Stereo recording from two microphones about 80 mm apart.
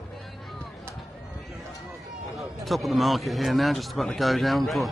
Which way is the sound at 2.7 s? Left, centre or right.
Centre.